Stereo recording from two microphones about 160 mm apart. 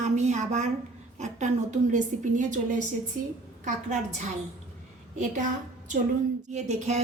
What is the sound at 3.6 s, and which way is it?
A woman's voice, 50° right (ahead or behind).